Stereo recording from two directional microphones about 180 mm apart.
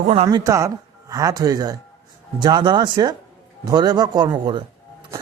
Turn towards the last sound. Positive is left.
turn(degrees=-25)  # may be behind; listen again after turning